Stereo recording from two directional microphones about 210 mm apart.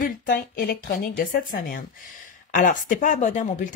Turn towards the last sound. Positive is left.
turn(degrees=35)  # may be behind; listen again after turning